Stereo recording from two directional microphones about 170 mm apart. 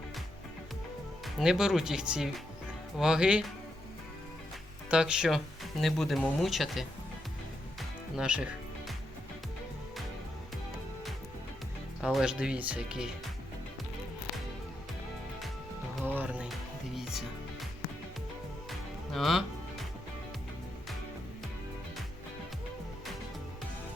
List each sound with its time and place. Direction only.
1.4 s speech: 5° right (ahead or behind)
4.9 s speech: 5° right (ahead or behind)
7.8 s music: 5° right (ahead or behind)
12.0 s speech: 5° right (ahead or behind)
16.0 s music: 10° right (ahead or behind)
18.7 s music: centre (ahead or behind)